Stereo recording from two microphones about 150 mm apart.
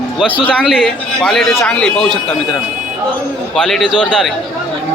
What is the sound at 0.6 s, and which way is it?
A man's voice, centre (ahead or behind).